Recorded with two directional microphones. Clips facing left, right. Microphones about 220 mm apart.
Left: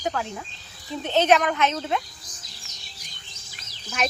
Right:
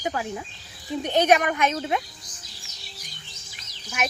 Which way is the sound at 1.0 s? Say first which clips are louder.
Even; 15° right (ahead or behind).